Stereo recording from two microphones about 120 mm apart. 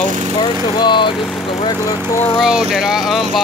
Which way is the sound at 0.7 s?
40° left (ahead or behind).